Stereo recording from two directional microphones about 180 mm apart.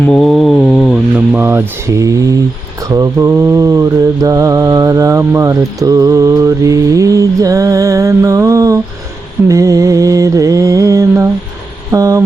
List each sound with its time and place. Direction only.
0.0 s mantra: 5° left (ahead or behind)
1.3 s mantra: 10° right (ahead or behind)
11.9 s a sound: 15° right (ahead or behind)